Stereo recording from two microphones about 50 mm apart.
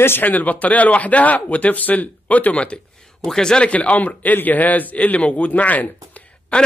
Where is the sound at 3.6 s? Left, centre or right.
Left.